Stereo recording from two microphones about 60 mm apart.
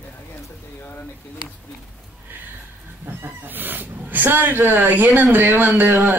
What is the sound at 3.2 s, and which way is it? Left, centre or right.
Speech, right.